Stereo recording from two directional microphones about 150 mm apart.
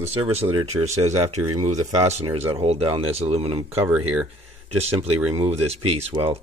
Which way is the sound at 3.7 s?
10° right (ahead or behind).